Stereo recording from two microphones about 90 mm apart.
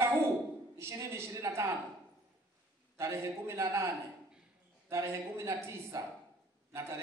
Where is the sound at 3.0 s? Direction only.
30° right (ahead or behind).